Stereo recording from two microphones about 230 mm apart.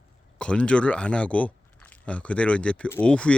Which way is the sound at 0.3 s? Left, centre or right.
Centre.